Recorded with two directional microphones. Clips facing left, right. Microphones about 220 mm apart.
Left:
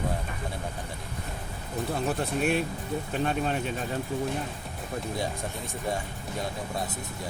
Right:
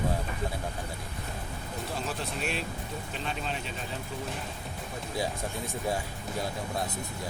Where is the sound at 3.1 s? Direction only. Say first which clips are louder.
Left 8 dB; 50° left (ahead or behind).